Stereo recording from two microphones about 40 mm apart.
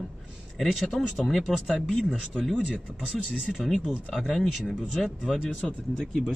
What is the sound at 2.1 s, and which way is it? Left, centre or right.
Speech, centre.